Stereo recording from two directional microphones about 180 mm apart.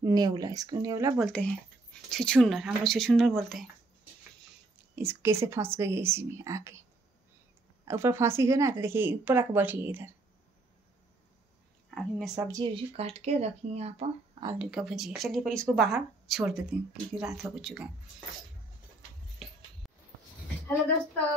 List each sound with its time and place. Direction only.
0.0 s speech: 20° right (ahead or behind)
1.2 s speech: 5° left (ahead or behind)
4.9 s speech: 15° right (ahead or behind)
7.8 s speech: 15° right (ahead or behind)
11.9 s speech: centre (ahead or behind)
12.4 s speech: 20° right (ahead or behind)
12.7 s speech: 35° right (ahead or behind)
14.6 s speech: centre (ahead or behind)